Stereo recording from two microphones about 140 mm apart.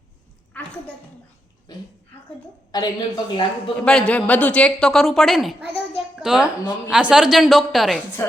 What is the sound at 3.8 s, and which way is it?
A woman's voice, 10° left (ahead or behind).